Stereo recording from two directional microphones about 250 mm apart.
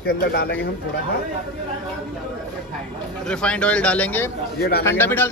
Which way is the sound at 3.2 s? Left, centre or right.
Centre.